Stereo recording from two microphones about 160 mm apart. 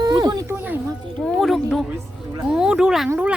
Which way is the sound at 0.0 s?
25° right (ahead or behind).